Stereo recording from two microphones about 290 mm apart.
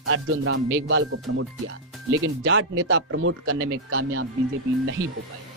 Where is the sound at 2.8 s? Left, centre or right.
Right.